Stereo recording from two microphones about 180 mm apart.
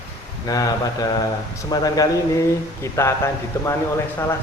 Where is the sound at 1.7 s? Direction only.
20° left (ahead or behind).